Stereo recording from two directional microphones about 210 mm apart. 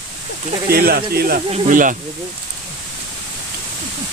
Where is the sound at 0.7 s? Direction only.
45° right (ahead or behind).